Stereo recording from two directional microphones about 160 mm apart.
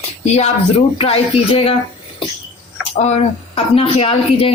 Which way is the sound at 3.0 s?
45° left (ahead or behind).